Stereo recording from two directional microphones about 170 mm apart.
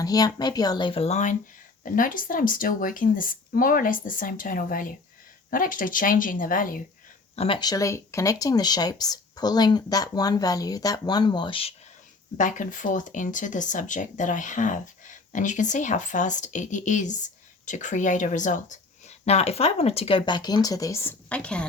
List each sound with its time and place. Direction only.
0.0 s speech: 20° left (ahead or behind); by 6.8 s 55° left (ahead or behind)
7.3 s speech: 30° left (ahead or behind)
12.4 s speech: 50° left (ahead or behind); by 21.7 s 5° left (ahead or behind)